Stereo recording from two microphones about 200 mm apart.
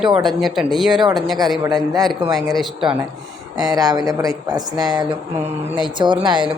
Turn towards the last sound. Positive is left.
turn(degrees=-20)  # may be behind; listen again after turning